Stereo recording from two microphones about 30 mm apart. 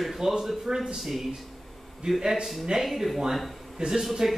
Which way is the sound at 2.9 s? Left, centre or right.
Centre.